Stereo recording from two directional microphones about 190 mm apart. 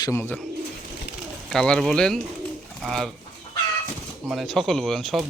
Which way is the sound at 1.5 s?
5° left (ahead or behind).